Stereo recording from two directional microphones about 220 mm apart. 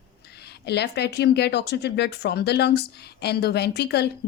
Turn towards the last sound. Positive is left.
turn(degrees=50)  # may be behind; listen again after turning